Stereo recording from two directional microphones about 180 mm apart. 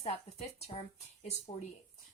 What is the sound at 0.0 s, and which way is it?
Speech, 35° left (ahead or behind).